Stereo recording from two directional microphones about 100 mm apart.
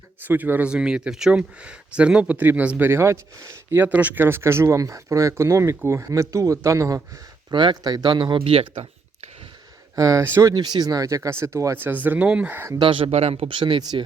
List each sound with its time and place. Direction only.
0.3 s speech: 20° right (ahead or behind)
3.8 s speech: 15° right (ahead or behind); by 7.0 s 35° right (ahead or behind)
7.5 s speech: 50° right (ahead or behind)
8.4 s speech: 70° right (ahead or behind)
9.9 s speech: 35° right (ahead or behind)
10.5 s speech: 45° right (ahead or behind); by 12.6 s 15° right (ahead or behind)
12.8 s speech: 60° right (ahead or behind)